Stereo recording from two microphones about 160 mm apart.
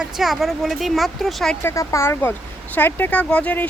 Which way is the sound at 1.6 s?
15° left (ahead or behind).